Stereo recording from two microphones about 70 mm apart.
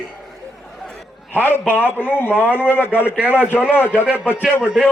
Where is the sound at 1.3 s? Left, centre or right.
Left.